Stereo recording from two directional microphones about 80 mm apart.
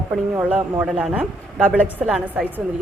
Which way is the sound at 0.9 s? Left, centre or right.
Centre.